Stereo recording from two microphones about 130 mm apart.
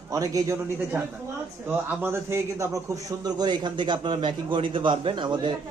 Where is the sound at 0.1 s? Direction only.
25° right (ahead or behind).